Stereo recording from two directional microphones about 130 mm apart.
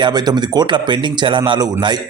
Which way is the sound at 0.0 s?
30° right (ahead or behind).